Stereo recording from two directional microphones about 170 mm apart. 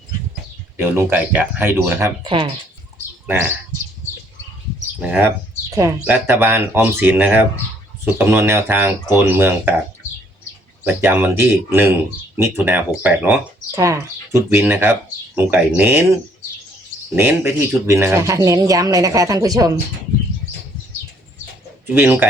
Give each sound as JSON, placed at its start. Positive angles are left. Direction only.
{"t": 0.8, "sound": "speech", "side_deg": -10}
{"t": 2.2, "sound": "speech", "side_deg": -30}
{"t": 3.2, "sound": "speech", "side_deg": -10}
{"t": 4.9, "sound": "speech", "side_deg": -10}
{"t": 10.8, "sound": "speech", "side_deg": -10}
{"t": 17.2, "sound": "speech", "side_deg": -15}
{"t": 21.8, "sound": "speech", "side_deg": -10}